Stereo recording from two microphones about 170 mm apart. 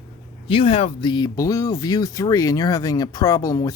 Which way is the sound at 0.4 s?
30° left (ahead or behind).